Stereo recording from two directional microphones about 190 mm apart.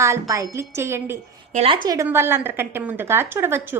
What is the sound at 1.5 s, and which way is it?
Speech, 30° right (ahead or behind).